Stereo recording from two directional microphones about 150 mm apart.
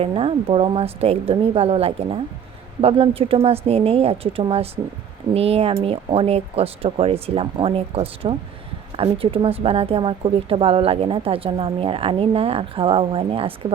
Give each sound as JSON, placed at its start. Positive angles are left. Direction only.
{"t": 0.0, "sound": "a woman's voice", "side_deg": -40}